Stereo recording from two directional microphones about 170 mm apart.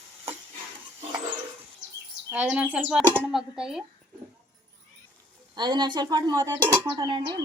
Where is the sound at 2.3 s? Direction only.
10° right (ahead or behind).